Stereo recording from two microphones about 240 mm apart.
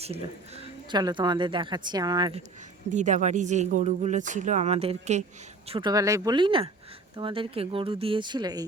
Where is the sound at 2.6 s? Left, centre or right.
Right.